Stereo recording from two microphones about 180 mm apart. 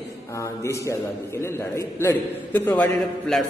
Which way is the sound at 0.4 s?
15° left (ahead or behind).